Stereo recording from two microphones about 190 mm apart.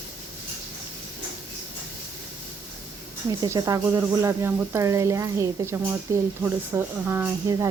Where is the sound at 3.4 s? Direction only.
15° right (ahead or behind).